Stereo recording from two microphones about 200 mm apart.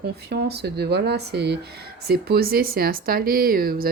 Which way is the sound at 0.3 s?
55° right (ahead or behind).